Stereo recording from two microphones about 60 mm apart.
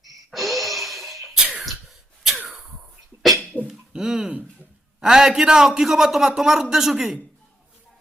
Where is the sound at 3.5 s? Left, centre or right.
Right.